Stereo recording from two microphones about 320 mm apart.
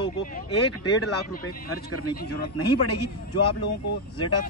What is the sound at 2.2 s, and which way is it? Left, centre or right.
Speech, left.